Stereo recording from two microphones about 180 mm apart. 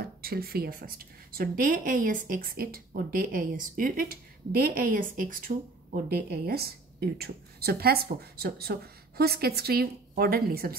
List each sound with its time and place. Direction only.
0.2 s a woman's voice: 60° right (ahead or behind)